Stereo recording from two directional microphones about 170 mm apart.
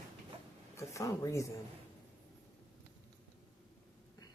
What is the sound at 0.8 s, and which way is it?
Speech, 20° left (ahead or behind).